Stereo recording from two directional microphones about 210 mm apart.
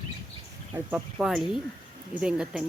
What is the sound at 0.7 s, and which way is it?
Speech, 5° right (ahead or behind).